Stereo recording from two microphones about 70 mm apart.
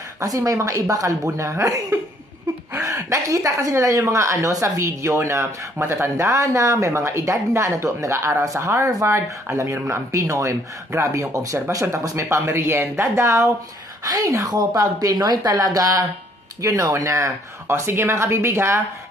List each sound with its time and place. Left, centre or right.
0.2 s a woman's voice: right
1.2 s speech: right
14.0 s a woman's voice: right